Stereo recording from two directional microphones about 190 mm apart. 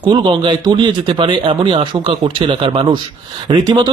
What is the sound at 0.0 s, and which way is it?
A man's voice, 25° right (ahead or behind).